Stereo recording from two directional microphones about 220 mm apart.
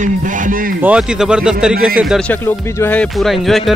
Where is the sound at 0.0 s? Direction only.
35° right (ahead or behind).